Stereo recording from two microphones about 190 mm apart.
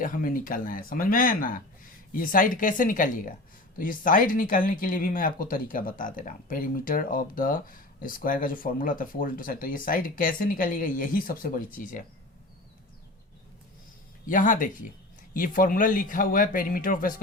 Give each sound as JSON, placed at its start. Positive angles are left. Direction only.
{"t": 0.0, "sound": "speech", "side_deg": 45}
{"t": 14.3, "sound": "speech", "side_deg": 45}